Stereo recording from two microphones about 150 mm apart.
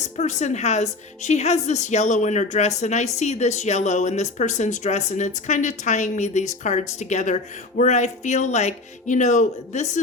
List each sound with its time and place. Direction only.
0.2 s a woman's voice: 50° left (ahead or behind)